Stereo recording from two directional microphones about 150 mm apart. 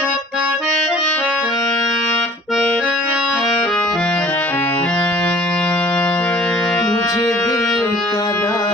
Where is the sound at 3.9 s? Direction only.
5° left (ahead or behind).